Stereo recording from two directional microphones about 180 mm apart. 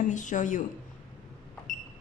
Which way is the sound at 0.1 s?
45° left (ahead or behind).